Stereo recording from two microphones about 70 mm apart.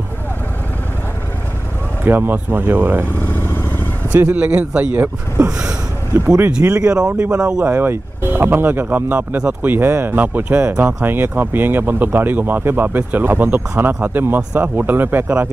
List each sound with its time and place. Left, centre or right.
2.0 s speech: right
4.2 s speech: right
6.1 s speech: right
6.6 s speech: right
6.9 s speech: centre
7.6 s speech: right
9.7 s speech: right